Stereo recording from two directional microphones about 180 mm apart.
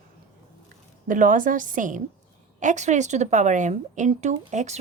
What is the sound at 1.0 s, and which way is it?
A woman's voice, 45° right (ahead or behind).